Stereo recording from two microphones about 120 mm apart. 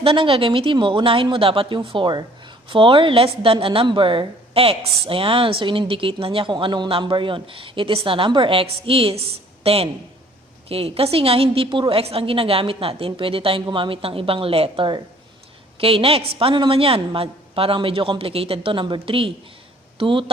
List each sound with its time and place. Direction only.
0.0 s speech: 50° right (ahead or behind)